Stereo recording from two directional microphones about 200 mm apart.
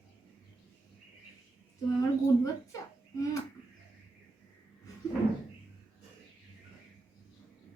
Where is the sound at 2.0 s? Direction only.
15° left (ahead or behind).